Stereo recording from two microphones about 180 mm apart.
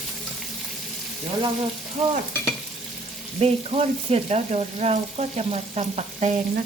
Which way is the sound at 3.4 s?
35° right (ahead or behind).